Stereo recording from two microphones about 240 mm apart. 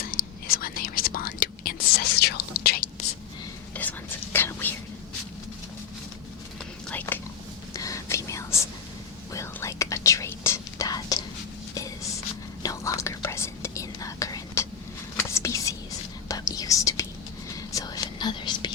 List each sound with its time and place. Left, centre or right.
0.1 s whispering: left
3.8 s whispering: centre
6.9 s whispering: centre
12.6 s whispering: centre